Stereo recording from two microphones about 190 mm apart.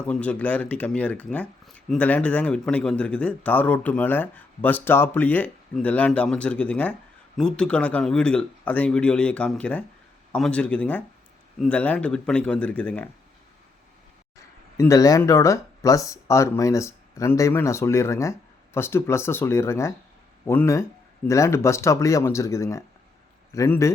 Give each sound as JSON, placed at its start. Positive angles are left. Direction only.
{"t": 0.1, "sound": "a man's voice", "side_deg": 5}
{"t": 14.8, "sound": "speech", "side_deg": 15}